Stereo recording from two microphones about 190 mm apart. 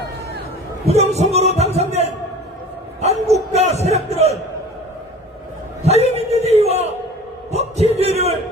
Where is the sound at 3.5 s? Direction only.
35° right (ahead or behind).